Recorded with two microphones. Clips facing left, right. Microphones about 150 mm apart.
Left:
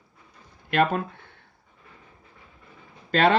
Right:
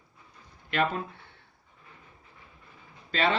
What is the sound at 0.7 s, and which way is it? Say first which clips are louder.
Speech: left 6 dB; 50° left (ahead or behind).